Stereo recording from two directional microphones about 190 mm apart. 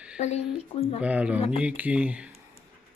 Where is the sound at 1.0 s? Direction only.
5° right (ahead or behind).